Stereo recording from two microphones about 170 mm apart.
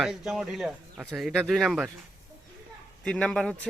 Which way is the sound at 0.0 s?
Centre (ahead or behind).